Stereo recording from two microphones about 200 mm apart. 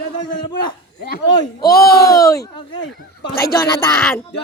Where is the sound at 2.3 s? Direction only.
20° left (ahead or behind).